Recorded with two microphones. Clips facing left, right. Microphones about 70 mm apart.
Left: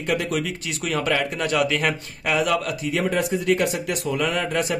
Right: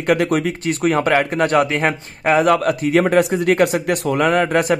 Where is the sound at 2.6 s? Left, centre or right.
Right.